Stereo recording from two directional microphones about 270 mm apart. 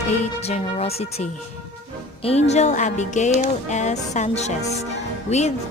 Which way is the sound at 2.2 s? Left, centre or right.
Left.